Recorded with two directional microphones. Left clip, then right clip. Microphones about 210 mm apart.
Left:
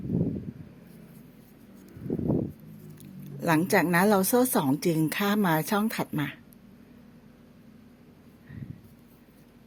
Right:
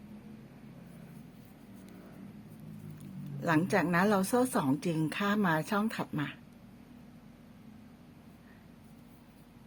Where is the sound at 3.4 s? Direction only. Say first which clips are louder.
Left 5 dB; 25° left (ahead or behind).